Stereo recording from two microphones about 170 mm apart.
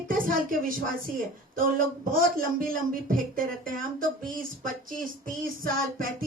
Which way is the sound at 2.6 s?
55° right (ahead or behind).